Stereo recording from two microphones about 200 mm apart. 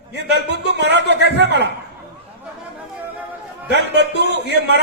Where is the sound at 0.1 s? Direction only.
60° right (ahead or behind).